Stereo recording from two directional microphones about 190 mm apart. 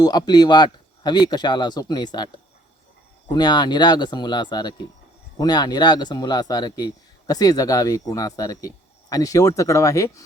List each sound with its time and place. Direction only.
0.0 s speech: 20° left (ahead or behind)